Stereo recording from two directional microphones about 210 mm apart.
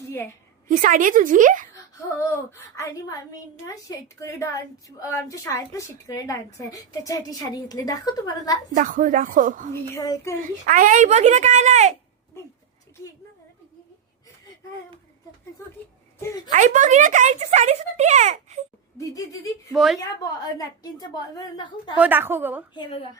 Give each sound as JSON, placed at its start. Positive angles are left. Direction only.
{"t": 0.7, "sound": "speech", "side_deg": -40}
{"t": 1.7, "sound": "speech", "side_deg": 15}
{"t": 8.7, "sound": "speech", "side_deg": -35}
{"t": 9.9, "sound": "speech", "side_deg": 15}
{"t": 10.4, "sound": "speech", "side_deg": -40}
{"t": 12.4, "sound": "speech", "side_deg": 10}
{"t": 16.5, "sound": "speech", "side_deg": -35}
{"t": 18.9, "sound": "speech", "side_deg": 15}
{"t": 19.7, "sound": "a woman's voice", "side_deg": 0}
{"t": 20.0, "sound": "a woman's voice", "side_deg": 15}
{"t": 21.9, "sound": "a woman's voice", "side_deg": -10}
{"t": 22.7, "sound": "a woman's voice", "side_deg": 20}